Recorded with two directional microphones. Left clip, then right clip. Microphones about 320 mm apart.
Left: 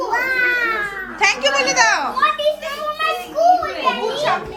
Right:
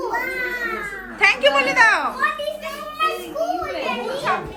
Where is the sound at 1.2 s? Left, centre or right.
Centre.